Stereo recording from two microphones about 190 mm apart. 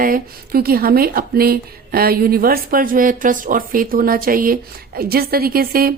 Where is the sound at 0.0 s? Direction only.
50° right (ahead or behind).